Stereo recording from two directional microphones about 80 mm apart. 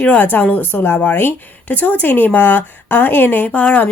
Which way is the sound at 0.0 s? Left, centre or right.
Centre.